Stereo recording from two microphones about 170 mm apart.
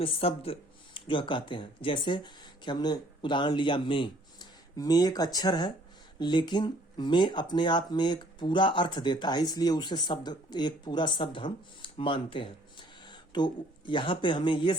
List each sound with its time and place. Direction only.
0.0 s speech: 35° left (ahead or behind)